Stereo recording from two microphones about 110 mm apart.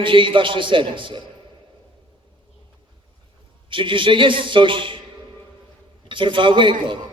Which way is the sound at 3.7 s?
50° right (ahead or behind).